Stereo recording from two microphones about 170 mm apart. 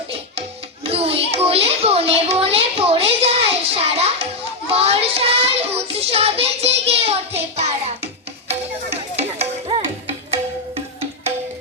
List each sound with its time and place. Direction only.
0.9 s a sound: 35° right (ahead or behind)
4.7 s child singing: 35° right (ahead or behind)
9.1 s music: 40° right (ahead or behind)